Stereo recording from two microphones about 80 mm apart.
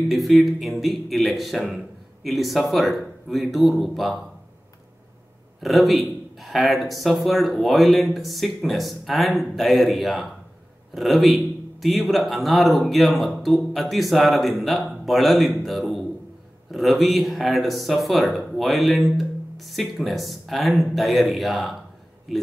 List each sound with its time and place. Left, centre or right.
0.1 s speech: centre
5.6 s speech: centre